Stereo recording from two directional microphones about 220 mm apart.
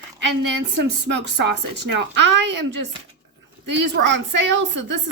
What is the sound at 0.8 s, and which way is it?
Speech, 50° right (ahead or behind).